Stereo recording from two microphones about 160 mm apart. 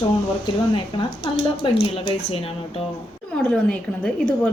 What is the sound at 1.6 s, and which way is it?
Speech, 35° left (ahead or behind).